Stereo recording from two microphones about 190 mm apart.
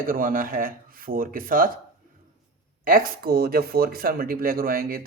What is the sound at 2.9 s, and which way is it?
Speech, 50° right (ahead or behind).